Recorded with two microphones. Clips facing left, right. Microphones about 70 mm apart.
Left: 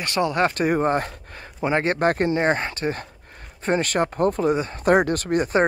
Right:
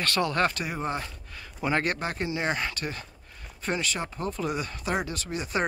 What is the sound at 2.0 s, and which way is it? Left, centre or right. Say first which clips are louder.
Speech: left 10 dB; left.